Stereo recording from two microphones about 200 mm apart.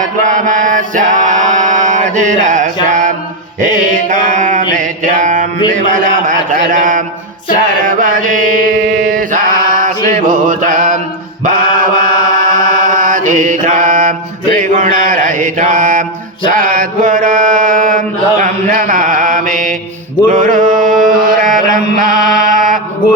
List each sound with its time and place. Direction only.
0.0 s chant: 40° right (ahead or behind)
2.8 s mantra: 40° right (ahead or behind)
10.1 s music: 45° right (ahead or behind)
11.4 s mantra: 45° right (ahead or behind)
21.5 s chant: 40° right (ahead or behind)
22.4 s mantra: 45° right (ahead or behind)